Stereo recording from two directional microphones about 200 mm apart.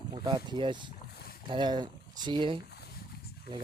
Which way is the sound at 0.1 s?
20° right (ahead or behind).